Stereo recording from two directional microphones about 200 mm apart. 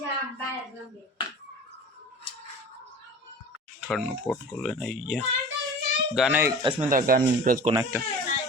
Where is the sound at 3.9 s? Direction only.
5° left (ahead or behind).